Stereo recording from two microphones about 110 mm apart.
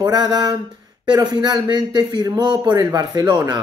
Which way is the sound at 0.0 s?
40° right (ahead or behind).